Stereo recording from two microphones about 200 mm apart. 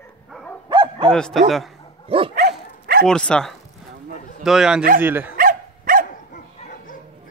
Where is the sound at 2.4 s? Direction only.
50° right (ahead or behind).